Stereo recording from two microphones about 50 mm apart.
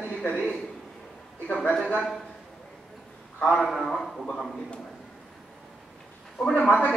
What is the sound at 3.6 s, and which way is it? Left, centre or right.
Speech, centre.